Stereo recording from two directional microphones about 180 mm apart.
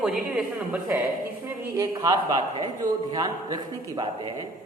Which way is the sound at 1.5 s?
15° right (ahead or behind).